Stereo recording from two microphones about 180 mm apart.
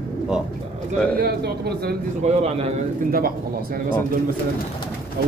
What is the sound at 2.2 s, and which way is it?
Speech, 35° right (ahead or behind).